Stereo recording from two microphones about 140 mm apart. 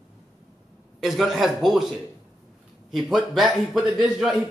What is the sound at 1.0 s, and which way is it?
Speech, centre (ahead or behind).